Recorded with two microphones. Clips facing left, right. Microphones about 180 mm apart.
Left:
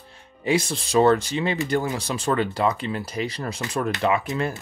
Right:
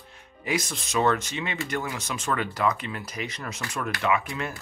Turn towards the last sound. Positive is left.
turn(degrees=30)  # may be behind; listen again after turning